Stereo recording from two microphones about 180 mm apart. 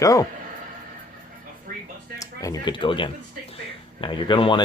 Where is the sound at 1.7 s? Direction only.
50° right (ahead or behind).